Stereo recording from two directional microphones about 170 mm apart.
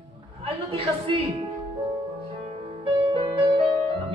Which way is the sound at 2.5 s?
35° right (ahead or behind).